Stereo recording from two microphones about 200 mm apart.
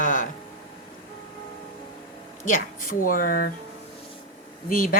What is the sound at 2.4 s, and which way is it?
Speech, 45° left (ahead or behind).